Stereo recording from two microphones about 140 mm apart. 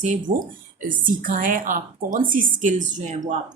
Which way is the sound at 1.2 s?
75° right (ahead or behind).